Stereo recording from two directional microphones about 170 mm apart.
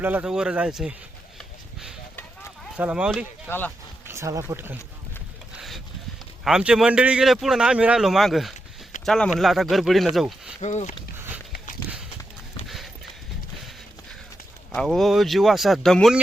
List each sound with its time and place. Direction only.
0.0 s speech: 10° right (ahead or behind)
2.7 s speech: 5° right (ahead or behind)
4.0 s speech: 15° right (ahead or behind)
5.5 s a sound: centre (ahead or behind)
6.4 s speech: 5° right (ahead or behind)
10.6 s speech: 40° left (ahead or behind)
12.6 s clip-clop: centre (ahead or behind)
14.7 s speech: 5° left (ahead or behind)